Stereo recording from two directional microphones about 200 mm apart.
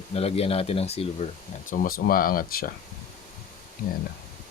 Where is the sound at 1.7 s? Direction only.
45° left (ahead or behind).